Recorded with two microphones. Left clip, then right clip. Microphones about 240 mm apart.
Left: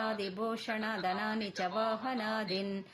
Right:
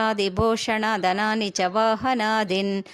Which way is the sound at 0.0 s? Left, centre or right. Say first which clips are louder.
Right 13 dB; right.